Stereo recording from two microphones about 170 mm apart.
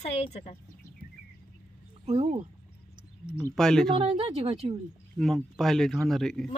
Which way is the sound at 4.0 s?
35° right (ahead or behind).